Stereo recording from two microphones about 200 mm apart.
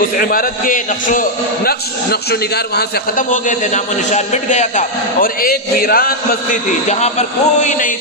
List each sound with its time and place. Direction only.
0.2 s a man's voice: 45° left (ahead or behind)
6.9 s music: 35° left (ahead or behind)